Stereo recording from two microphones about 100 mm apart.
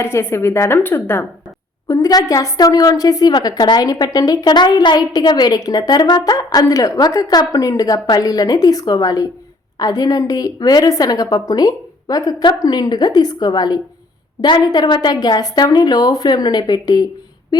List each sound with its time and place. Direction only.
0.0 s a woman's voice: 25° left (ahead or behind)
1.9 s a woman's voice: 35° left (ahead or behind)